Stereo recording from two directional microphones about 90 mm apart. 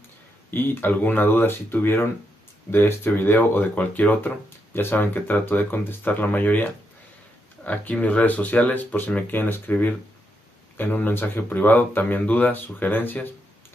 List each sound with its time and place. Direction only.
0.5 s speech: 25° left (ahead or behind)